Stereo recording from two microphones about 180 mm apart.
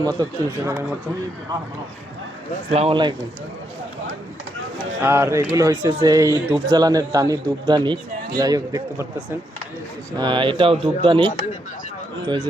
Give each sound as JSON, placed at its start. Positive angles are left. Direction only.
{"t": 0.0, "sound": "speech", "side_deg": -20}
{"t": 2.6, "sound": "speech", "side_deg": -35}
{"t": 5.0, "sound": "a man's voice", "side_deg": -15}